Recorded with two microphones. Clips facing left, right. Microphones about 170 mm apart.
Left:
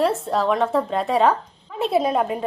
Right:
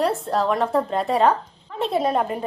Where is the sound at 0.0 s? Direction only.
Centre (ahead or behind).